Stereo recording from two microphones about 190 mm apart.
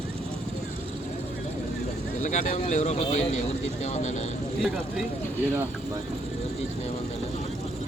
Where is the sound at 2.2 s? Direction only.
40° left (ahead or behind).